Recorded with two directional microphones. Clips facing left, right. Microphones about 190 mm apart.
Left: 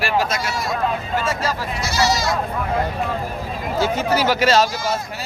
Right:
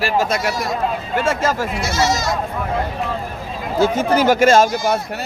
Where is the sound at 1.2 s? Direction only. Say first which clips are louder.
Right 4 dB; 50° right (ahead or behind).